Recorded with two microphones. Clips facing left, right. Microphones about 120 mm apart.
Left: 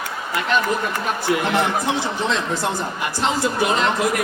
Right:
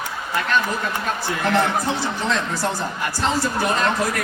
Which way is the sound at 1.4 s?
15° left (ahead or behind).